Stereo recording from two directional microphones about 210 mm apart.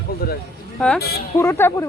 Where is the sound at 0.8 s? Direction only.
5° left (ahead or behind).